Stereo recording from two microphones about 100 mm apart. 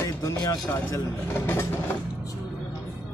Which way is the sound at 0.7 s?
25° left (ahead or behind).